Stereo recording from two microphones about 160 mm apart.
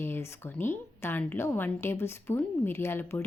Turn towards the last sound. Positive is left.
turn(degrees=15)  # may be behind; listen again after turning